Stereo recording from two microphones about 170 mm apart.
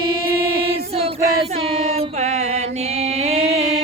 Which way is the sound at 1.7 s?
40° right (ahead or behind).